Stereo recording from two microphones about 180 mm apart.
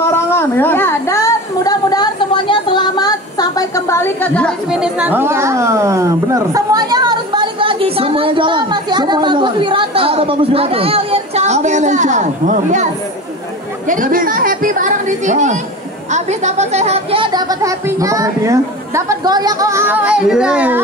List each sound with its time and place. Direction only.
0.0 s a woman's voice: 15° left (ahead or behind); by 12.8 s 40° right (ahead or behind)
13.8 s a sound: 50° right (ahead or behind)
16.1 s speech: 40° right (ahead or behind); by 20.8 s 5° right (ahead or behind)